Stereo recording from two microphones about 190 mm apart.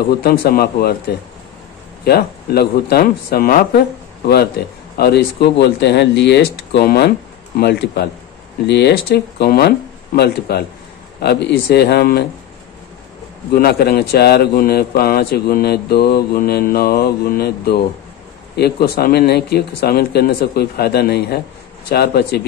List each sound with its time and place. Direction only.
0.1 s a man's voice: 55° left (ahead or behind)
2.0 s a man's voice: 55° left (ahead or behind)
13.6 s a man's voice: 55° left (ahead or behind)